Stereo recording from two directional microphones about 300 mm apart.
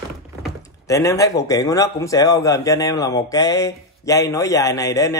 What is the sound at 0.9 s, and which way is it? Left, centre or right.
Speech, centre.